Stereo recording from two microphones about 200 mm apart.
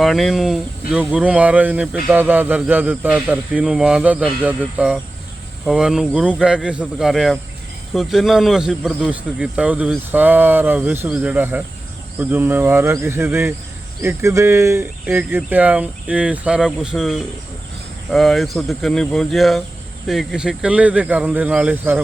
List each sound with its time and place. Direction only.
0.0 s speech: centre (ahead or behind)